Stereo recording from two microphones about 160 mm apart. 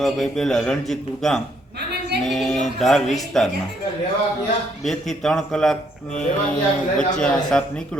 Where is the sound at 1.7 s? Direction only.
90° right.